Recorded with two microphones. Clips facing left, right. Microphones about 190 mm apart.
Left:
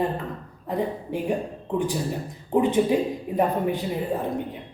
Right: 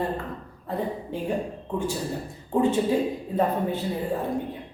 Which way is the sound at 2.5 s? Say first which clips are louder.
Left 2 dB; 15° left (ahead or behind).